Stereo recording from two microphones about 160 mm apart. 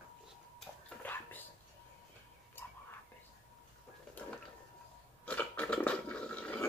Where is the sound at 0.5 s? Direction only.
10° left (ahead or behind).